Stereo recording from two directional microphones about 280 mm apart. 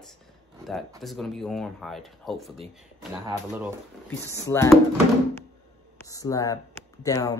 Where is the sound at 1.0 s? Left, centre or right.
Centre.